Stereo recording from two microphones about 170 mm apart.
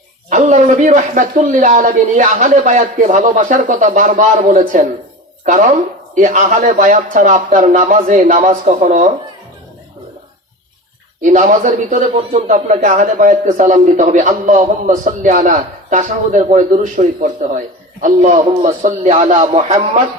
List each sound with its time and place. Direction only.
0.3 s a man's voice: 45° right (ahead or behind)
6.1 s a man's voice: 50° right (ahead or behind)
11.2 s a man's voice: 45° right (ahead or behind)